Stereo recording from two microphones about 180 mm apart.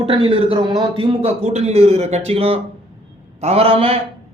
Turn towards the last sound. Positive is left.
turn(degrees=-30)  # may be behind; listen again after turning